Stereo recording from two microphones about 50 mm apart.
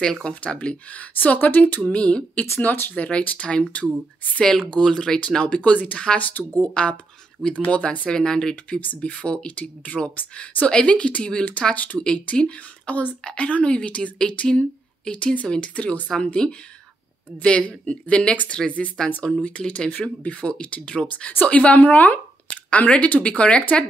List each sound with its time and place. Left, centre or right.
0.0 s speech: centre; by 1.8 s left
1.9 s speech: left
2.6 s speech: left
4.4 s speech: centre
5.6 s speech: left
6.6 s speech: left
8.2 s speech: centre
8.7 s speech: left
10.7 s speech: left
12.0 s speech: centre
16.4 s speech: centre
19.0 s speech: centre
19.4 s speech: left